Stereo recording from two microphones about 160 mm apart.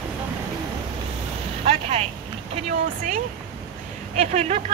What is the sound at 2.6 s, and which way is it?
Speech, 50° right (ahead or behind).